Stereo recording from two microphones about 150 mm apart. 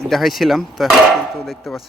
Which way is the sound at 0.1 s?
Centre (ahead or behind).